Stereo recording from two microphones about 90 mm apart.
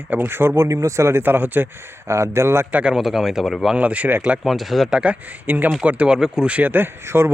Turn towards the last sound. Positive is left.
turn(degrees=-30)  # may be behind; listen again after turning